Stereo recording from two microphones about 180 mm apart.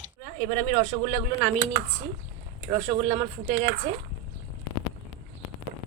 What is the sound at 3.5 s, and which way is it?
Speech, 50° right (ahead or behind).